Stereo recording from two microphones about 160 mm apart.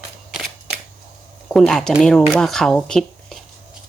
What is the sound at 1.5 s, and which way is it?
A woman's voice, 5° left (ahead or behind).